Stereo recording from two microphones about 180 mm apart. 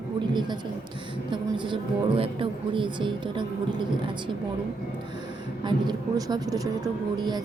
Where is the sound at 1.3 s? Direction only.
30° right (ahead or behind).